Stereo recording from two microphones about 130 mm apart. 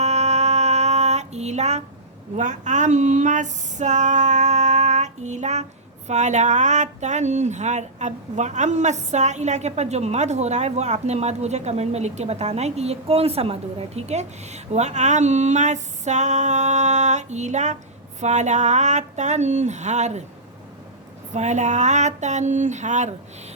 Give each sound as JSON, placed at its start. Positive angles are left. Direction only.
{"t": 0.0, "sound": "female singing", "side_deg": -60}
{"t": 2.3, "sound": "speech", "side_deg": -70}
{"t": 21.3, "sound": "speech", "side_deg": -65}